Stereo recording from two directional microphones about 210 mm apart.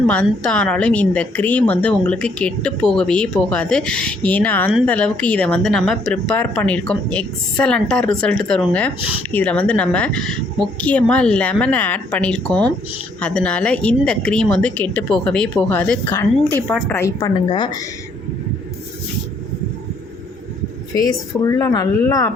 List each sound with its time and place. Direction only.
0.1 s a woman's voice: 5° left (ahead or behind)
20.9 s a woman's voice: 15° left (ahead or behind)